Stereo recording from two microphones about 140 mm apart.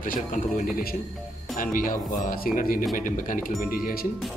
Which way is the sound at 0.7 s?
90° left.